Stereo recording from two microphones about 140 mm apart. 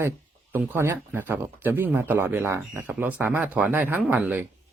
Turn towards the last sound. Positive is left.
turn(degrees=-10)  # may be behind; listen again after turning